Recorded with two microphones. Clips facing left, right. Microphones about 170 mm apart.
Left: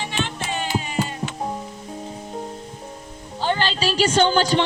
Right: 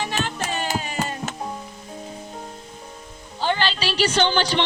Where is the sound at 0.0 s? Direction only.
40° right (ahead or behind).